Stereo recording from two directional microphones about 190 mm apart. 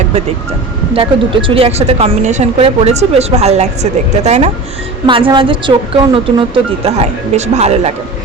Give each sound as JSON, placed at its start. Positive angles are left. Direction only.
{"t": 0.9, "sound": "speech", "side_deg": -25}
{"t": 5.0, "sound": "a woman's voice", "side_deg": -25}